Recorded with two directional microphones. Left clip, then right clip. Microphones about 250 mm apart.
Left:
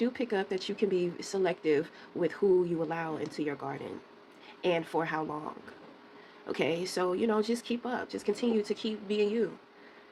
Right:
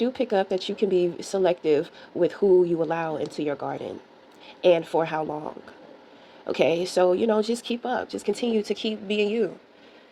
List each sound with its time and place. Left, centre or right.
0.0 s speech: right
6.5 s speech: right